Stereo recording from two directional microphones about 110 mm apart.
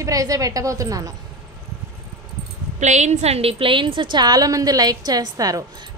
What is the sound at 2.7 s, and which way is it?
A woman's voice, 90° right.